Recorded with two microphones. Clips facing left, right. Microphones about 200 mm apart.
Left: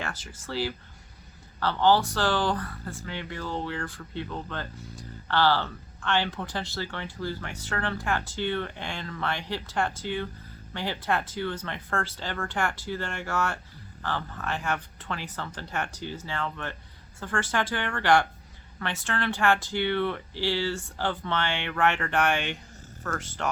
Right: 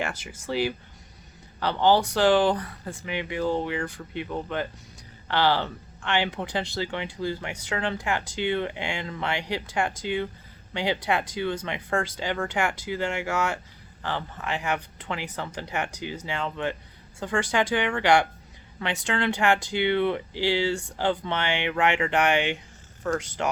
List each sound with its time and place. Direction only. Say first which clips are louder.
0.0 s speech: right 5 dB; 10° right (ahead or behind)